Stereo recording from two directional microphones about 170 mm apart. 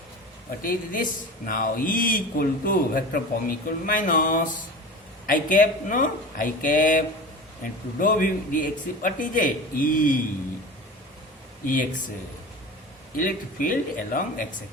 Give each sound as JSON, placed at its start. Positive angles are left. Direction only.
{"t": 0.6, "sound": "a man's voice", "side_deg": 55}
{"t": 11.6, "sound": "a man's voice", "side_deg": 50}
{"t": 13.1, "sound": "speech", "side_deg": 55}